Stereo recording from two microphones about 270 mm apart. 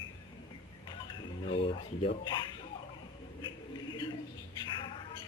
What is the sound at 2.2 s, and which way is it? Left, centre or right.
Speech, centre.